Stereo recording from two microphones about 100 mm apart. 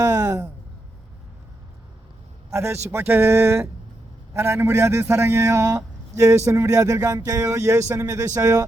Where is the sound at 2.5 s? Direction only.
25° right (ahead or behind).